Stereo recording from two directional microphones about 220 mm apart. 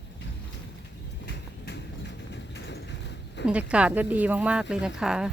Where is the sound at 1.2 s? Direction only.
50° left (ahead or behind).